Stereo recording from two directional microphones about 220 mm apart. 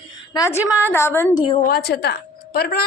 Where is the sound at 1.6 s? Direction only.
45° left (ahead or behind).